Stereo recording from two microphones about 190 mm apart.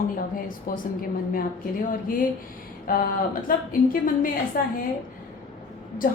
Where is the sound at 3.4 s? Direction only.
45° left (ahead or behind).